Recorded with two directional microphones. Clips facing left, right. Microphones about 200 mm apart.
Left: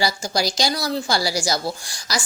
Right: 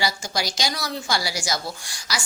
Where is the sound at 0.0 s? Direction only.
35° left (ahead or behind).